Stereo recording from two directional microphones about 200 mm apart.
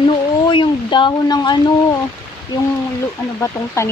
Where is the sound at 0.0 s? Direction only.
25° left (ahead or behind).